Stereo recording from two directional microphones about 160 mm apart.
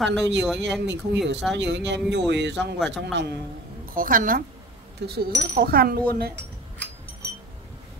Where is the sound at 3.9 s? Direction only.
60° right (ahead or behind).